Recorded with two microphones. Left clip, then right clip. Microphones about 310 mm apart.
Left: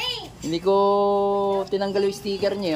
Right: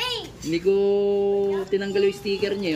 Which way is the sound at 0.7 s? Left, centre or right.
Centre.